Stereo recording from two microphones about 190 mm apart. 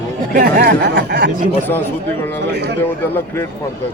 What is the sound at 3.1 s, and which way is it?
Speech, 10° left (ahead or behind).